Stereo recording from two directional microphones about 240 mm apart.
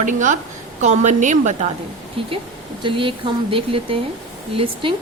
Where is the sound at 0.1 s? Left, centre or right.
Right.